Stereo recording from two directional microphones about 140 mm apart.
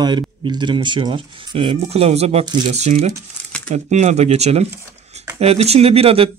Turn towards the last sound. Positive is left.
turn(degrees=-45)  # may be behind; listen again after turning